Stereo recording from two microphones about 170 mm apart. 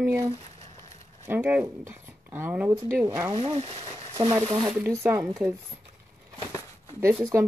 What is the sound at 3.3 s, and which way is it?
Speech, 35° right (ahead or behind).